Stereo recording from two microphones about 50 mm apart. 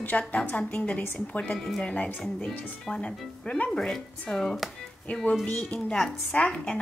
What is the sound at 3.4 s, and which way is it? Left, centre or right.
Speech, left.